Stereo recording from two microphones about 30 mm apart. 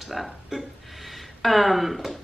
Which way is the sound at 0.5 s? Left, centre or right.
Centre.